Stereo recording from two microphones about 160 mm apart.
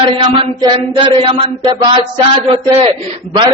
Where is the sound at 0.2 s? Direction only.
35° right (ahead or behind).